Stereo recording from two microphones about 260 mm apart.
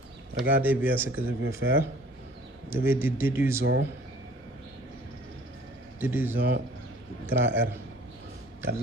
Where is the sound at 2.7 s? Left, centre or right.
Centre.